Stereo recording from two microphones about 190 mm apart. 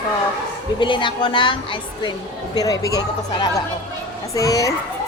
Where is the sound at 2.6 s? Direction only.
20° left (ahead or behind).